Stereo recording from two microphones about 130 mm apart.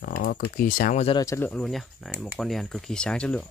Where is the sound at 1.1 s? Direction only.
20° left (ahead or behind).